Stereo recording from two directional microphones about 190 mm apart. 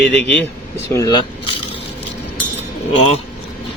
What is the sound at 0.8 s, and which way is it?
Speech, 15° left (ahead or behind).